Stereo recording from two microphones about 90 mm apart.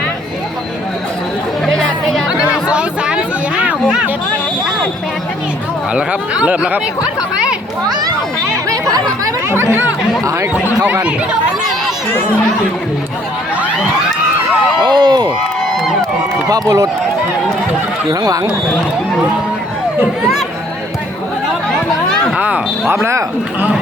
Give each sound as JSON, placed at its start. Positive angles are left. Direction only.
{"t": 1.6, "sound": "chatter", "side_deg": 5}
{"t": 2.5, "sound": "a sound", "side_deg": -10}
{"t": 5.9, "sound": "speech", "side_deg": -10}
{"t": 8.7, "sound": "chatter", "side_deg": -45}
{"t": 9.5, "sound": "speech", "side_deg": -25}
{"t": 14.8, "sound": "speech", "side_deg": -55}
{"t": 16.5, "sound": "speech", "side_deg": -40}
{"t": 18.1, "sound": "speech", "side_deg": -45}
{"t": 21.8, "sound": "chatter", "side_deg": 5}
{"t": 22.4, "sound": "a sound", "side_deg": -15}